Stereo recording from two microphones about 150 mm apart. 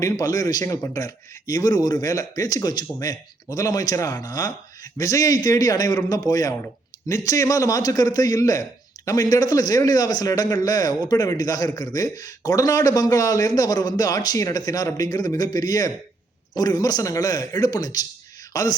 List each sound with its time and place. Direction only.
0.0 s a man's voice: 25° left (ahead or behind)